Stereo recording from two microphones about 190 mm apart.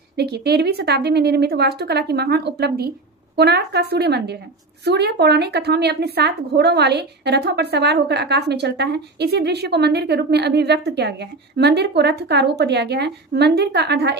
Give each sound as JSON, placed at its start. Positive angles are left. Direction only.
{"t": 0.1, "sound": "a woman's voice", "side_deg": -60}